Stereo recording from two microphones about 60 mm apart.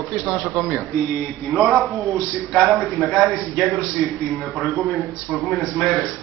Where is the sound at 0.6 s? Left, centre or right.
Centre.